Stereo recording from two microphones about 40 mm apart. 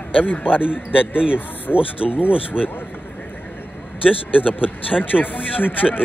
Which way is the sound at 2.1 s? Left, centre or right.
Left.